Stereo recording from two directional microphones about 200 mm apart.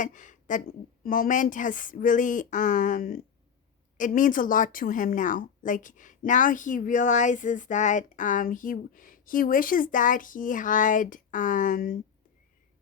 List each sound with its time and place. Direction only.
0.0 s a woman's voice: 40° left (ahead or behind)